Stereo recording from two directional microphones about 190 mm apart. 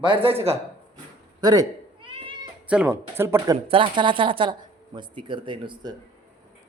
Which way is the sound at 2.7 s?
5° right (ahead or behind).